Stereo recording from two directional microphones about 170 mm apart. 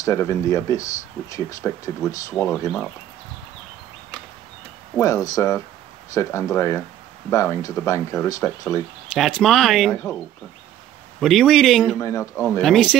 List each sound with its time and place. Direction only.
0.0 s speech: 15° left (ahead or behind)
4.9 s speech: 20° left (ahead or behind)
9.1 s speech: centre (ahead or behind)
11.1 s speech: centre (ahead or behind)
12.0 s speech: 15° left (ahead or behind)
12.6 s speech: centre (ahead or behind)